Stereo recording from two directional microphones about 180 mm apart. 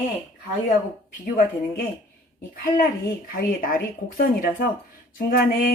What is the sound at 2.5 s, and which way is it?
Speech, 50° left (ahead or behind).